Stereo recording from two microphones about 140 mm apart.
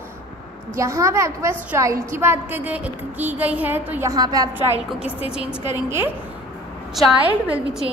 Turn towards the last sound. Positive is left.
turn(degrees=-10)  # may be behind; listen again after turning